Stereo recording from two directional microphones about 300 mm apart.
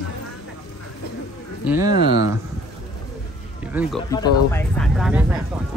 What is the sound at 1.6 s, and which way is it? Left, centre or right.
Speech, centre.